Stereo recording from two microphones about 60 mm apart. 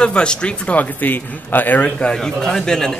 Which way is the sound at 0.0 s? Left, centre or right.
Centre.